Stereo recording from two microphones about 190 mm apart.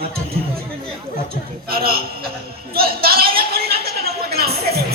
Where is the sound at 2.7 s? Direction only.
55° right (ahead or behind).